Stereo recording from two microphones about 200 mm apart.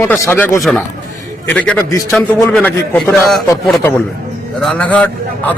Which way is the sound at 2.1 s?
5° left (ahead or behind).